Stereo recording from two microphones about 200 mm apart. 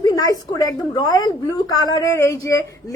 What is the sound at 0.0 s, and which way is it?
A woman's voice, 15° left (ahead or behind).